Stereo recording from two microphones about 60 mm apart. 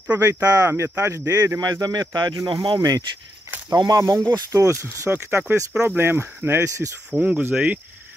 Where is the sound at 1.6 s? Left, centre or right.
Right.